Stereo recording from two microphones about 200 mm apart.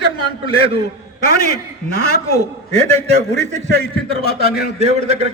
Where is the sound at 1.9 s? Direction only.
50° left (ahead or behind).